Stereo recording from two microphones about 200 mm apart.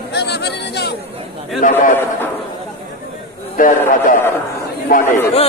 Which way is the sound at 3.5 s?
40° left (ahead or behind).